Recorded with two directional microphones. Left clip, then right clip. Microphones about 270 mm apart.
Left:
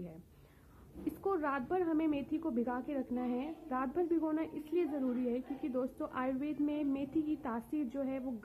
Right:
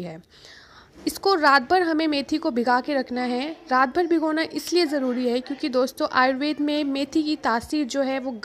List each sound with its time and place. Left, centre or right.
1.2 s a woman's voice: right